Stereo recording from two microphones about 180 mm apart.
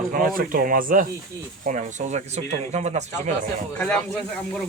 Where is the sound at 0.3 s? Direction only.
50° right (ahead or behind).